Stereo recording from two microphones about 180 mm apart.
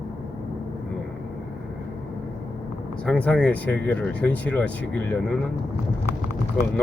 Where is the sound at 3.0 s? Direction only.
5° left (ahead or behind).